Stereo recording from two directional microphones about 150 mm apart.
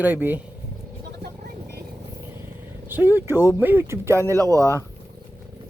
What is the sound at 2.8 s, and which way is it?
Speech, 15° right (ahead or behind).